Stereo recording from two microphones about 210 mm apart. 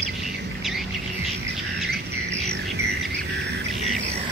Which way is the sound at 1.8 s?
50° right (ahead or behind).